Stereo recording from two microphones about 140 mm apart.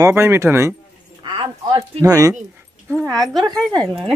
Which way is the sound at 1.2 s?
35° right (ahead or behind).